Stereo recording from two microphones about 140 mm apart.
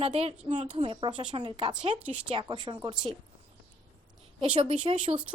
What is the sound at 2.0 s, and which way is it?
Speech, 10° right (ahead or behind).